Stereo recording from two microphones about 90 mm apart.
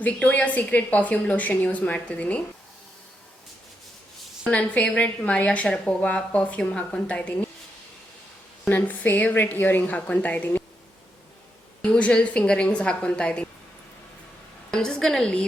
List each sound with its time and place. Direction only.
0.0 s speech: 15° left (ahead or behind)
4.4 s speech: 15° left (ahead or behind)
8.7 s a woman's voice: 20° left (ahead or behind)
11.8 s speech: 15° left (ahead or behind)
14.7 s speech: 5° left (ahead or behind)